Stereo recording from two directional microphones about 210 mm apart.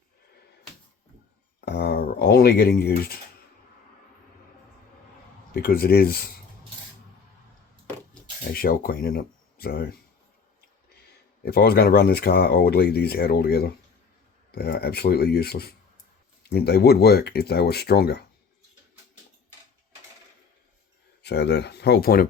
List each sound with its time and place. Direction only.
1.6 s speech: 50° left (ahead or behind)
5.5 s speech: 45° left (ahead or behind)
8.5 s speech: 45° left (ahead or behind)
11.4 s speech: 50° left (ahead or behind)
21.2 s speech: 55° left (ahead or behind)